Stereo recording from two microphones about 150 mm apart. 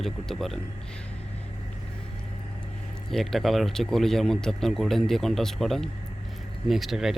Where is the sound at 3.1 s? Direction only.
Centre (ahead or behind).